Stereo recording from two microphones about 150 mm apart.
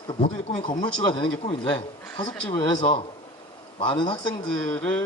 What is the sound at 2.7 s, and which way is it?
Speech, 40° left (ahead or behind).